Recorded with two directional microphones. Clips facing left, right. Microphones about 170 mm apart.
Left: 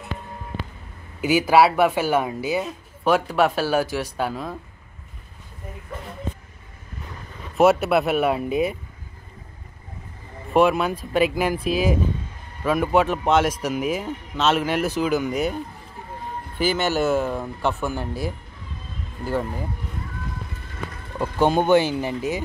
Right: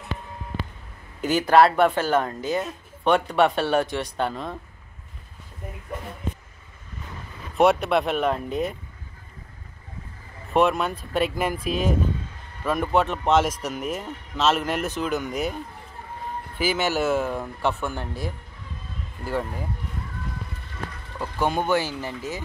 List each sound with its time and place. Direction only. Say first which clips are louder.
1.2 s speech: left 1 dB; 10° left (ahead or behind)
7.5 s speech: left 2 dB; 5° left (ahead or behind)
10.5 s speech: left 3 dB; centre (ahead or behind)
16.5 s speech: left 2 dB; 5° right (ahead or behind)
21.2 s speech: left 5 dB; 25° left (ahead or behind)